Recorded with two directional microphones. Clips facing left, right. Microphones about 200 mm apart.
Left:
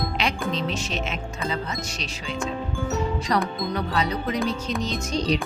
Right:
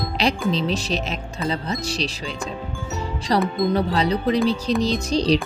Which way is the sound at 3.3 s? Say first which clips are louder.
Right 8 dB; 30° right (ahead or behind).